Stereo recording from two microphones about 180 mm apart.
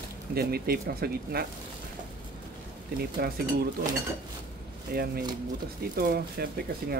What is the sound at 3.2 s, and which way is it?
Speech, 60° right (ahead or behind).